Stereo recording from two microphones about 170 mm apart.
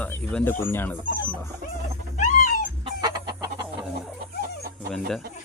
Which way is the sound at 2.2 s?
50° left (ahead or behind).